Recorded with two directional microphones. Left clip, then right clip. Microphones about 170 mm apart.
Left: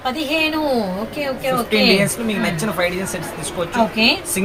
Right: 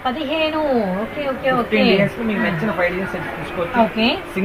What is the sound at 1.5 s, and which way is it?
Speech, 35° left (ahead or behind).